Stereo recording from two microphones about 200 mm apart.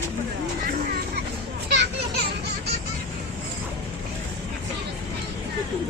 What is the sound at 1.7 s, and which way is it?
Children playing, 60° right (ahead or behind).